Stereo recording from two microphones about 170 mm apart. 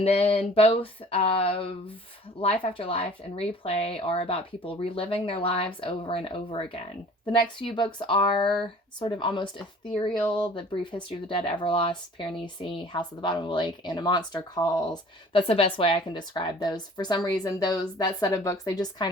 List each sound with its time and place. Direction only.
0.0 s speech: 35° left (ahead or behind)